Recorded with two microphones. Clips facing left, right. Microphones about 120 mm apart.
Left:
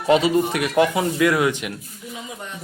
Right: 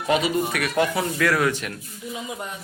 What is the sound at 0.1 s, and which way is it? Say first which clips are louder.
Speech: left 5 dB; 25° left (ahead or behind).